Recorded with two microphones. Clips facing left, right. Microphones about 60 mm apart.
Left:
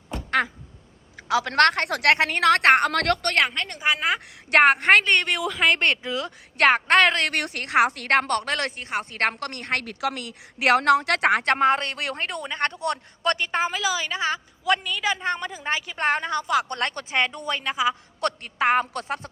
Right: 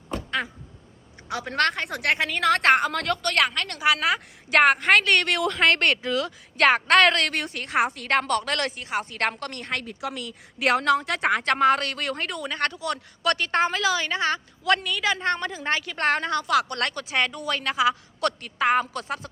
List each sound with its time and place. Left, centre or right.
0.3 s quack: left
1.3 s a woman's voice: left
3.3 s speech: left
4.5 s a woman's voice: left
5.0 s a woman's voice: centre
6.1 s speech: left
7.3 s a woman's voice: left
8.1 s a woman's voice: left
9.4 s a woman's voice: left
11.5 s speech: left
12.8 s a woman's voice: left
13.4 s a woman's voice: centre; by 17.6 s left
17.6 s speech: centre
18.2 s a woman's voice: left